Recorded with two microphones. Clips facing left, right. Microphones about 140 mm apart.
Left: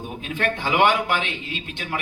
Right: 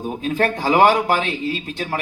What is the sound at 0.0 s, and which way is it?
A man's voice, 40° right (ahead or behind).